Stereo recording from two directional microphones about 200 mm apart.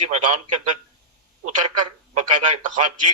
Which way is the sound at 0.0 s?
30° right (ahead or behind).